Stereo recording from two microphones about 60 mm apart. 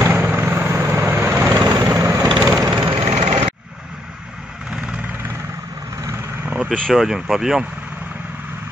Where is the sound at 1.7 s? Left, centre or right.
Right.